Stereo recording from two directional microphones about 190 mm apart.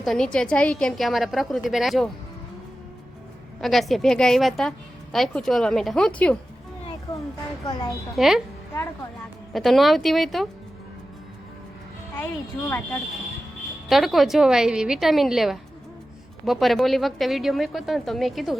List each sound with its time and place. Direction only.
0.0 s speech: centre (ahead or behind)
3.6 s speech: centre (ahead or behind)
7.1 s a sound: 20° left (ahead or behind)
7.7 s a woman's voice: 20° left (ahead or behind)
8.1 s speech: centre (ahead or behind)
9.5 s speech: centre (ahead or behind)
12.1 s speech: 10° left (ahead or behind)
13.8 s speech: centre (ahead or behind)